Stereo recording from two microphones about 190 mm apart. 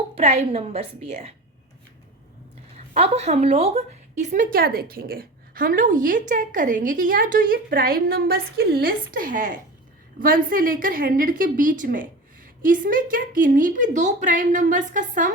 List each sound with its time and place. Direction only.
0.2 s a woman's voice: 35° right (ahead or behind)
2.7 s a woman's voice: 35° right (ahead or behind)